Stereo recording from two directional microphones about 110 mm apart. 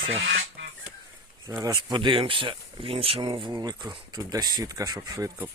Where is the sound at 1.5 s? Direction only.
25° right (ahead or behind).